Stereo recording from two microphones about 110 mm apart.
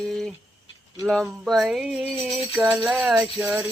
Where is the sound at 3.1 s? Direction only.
10° right (ahead or behind).